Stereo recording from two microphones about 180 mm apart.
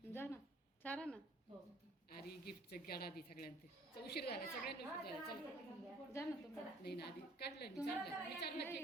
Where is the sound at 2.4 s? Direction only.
60° left (ahead or behind).